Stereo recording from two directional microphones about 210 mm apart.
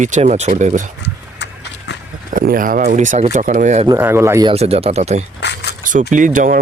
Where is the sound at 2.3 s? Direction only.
40° right (ahead or behind).